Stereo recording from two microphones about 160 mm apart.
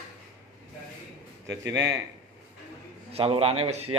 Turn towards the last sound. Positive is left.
turn(degrees=-40)  # may be behind; listen again after turning